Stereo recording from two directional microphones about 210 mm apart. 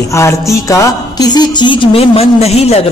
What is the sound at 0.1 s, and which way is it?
A woman's voice, 15° left (ahead or behind).